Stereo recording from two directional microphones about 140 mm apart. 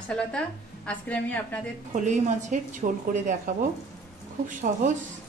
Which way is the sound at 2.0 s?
60° right (ahead or behind).